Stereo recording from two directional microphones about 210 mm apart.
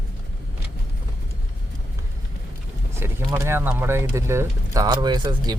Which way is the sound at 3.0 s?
15° right (ahead or behind).